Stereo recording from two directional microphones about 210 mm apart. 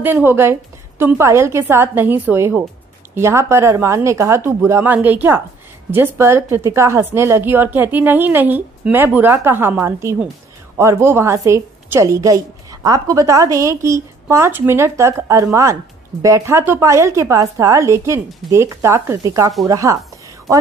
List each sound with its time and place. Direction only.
0.0 s a woman's voice: 10° right (ahead or behind)